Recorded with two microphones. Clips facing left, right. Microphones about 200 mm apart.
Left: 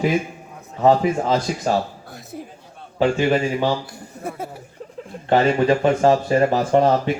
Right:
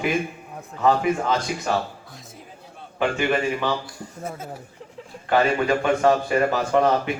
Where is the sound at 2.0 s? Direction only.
65° left (ahead or behind).